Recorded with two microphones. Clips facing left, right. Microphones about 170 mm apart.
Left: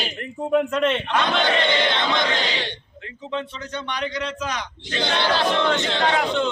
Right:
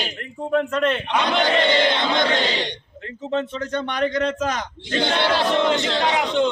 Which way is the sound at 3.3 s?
45° right (ahead or behind).